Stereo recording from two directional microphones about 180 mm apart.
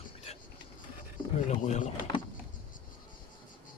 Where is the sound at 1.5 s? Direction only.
40° left (ahead or behind).